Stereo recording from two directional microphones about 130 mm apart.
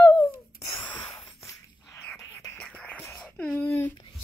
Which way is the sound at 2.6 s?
10° left (ahead or behind).